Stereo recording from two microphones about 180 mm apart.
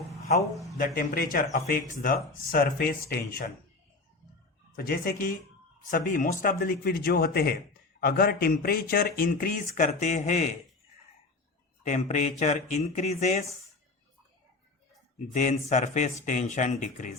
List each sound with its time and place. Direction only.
0.5 s speech: centre (ahead or behind)
0.9 s a man's voice: 50° left (ahead or behind)
4.8 s a man's voice: 60° left (ahead or behind); by 10.5 s 40° left (ahead or behind)
11.8 s speech: 40° left (ahead or behind)
15.3 s a man's voice: 45° left (ahead or behind)